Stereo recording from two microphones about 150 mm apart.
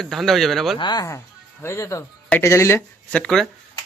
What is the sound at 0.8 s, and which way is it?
Speech, 30° left (ahead or behind).